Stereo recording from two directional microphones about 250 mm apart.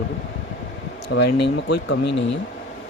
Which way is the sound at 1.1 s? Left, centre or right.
Left.